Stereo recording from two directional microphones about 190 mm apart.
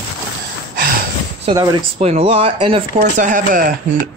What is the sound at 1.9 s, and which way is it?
Speech, 30° right (ahead or behind).